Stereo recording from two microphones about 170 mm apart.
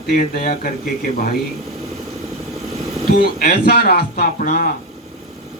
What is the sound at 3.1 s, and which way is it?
A man's voice, 65° left (ahead or behind).